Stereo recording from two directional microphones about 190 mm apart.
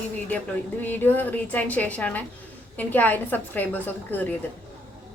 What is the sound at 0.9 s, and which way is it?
A woman's voice, 10° left (ahead or behind).